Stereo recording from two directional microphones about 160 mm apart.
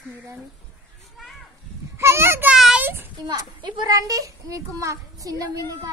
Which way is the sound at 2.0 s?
15° right (ahead or behind).